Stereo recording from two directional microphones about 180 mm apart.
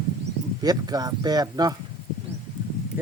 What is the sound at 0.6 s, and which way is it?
Speech, 20° right (ahead or behind).